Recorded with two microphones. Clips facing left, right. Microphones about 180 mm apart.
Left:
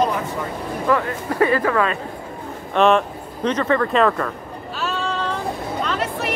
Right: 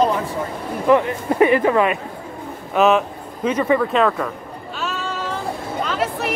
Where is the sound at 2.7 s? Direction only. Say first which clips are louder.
Even; 5° right (ahead or behind).